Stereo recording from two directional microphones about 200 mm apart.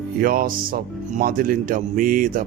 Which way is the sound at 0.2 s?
45° right (ahead or behind).